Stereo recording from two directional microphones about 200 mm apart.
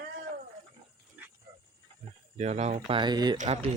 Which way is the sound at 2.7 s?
25° right (ahead or behind).